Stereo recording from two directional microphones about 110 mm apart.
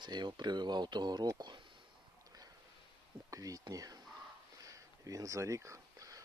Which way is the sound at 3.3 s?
30° right (ahead or behind).